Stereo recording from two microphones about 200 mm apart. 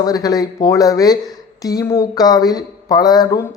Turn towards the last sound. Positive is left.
turn(degrees=20)  # may be behind; listen again after turning